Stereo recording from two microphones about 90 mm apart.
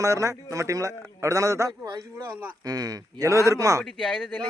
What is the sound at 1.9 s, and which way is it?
A man's voice, 45° right (ahead or behind).